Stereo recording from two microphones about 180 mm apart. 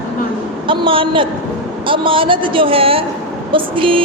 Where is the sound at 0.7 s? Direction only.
30° right (ahead or behind).